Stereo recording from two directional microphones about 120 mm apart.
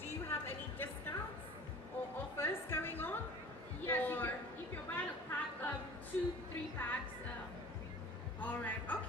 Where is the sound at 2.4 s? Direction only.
20° left (ahead or behind).